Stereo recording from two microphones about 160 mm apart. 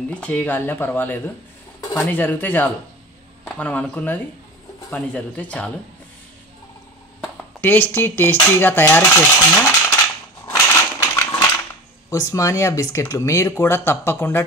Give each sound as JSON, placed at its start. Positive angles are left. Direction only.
{"t": 0.1, "sound": "dishes", "side_deg": 5}
{"t": 1.8, "sound": "speech", "side_deg": 15}
{"t": 3.4, "sound": "dishes", "side_deg": 10}
{"t": 7.6, "sound": "dishes", "side_deg": 10}
{"t": 11.0, "sound": "a sound", "side_deg": 20}
{"t": 12.1, "sound": "dishes", "side_deg": 20}